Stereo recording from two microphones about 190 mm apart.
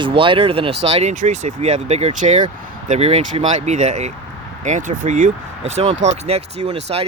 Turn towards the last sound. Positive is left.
turn(degrees=-30)  # may be behind; listen again after turning